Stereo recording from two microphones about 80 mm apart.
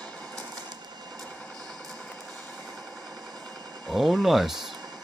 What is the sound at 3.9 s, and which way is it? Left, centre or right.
Speech, centre.